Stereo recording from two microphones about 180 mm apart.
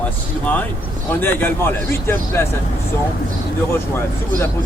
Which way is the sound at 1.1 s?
10° left (ahead or behind).